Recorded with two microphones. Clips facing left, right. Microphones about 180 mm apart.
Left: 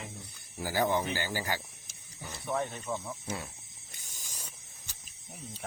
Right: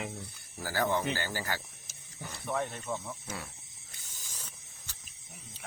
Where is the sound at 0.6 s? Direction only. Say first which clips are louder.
Left 1 dB; 15° left (ahead or behind).